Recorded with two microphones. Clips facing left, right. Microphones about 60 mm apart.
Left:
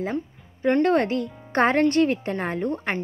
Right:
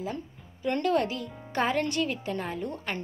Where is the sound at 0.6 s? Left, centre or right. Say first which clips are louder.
Left 6 dB; left.